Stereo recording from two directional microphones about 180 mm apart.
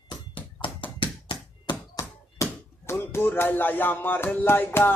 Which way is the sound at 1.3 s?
20° left (ahead or behind).